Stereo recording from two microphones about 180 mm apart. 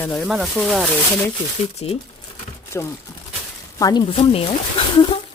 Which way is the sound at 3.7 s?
20° left (ahead or behind).